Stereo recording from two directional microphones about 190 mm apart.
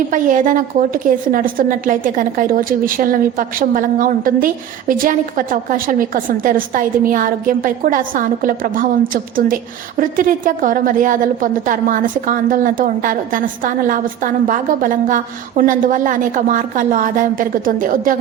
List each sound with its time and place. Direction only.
0.1 s a woman's voice: 45° right (ahead or behind)